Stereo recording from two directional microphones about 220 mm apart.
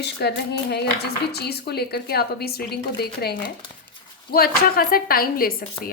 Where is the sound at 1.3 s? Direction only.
45° left (ahead or behind).